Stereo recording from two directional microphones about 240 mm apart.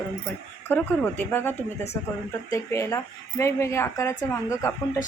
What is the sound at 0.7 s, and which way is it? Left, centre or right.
A woman's voice, centre.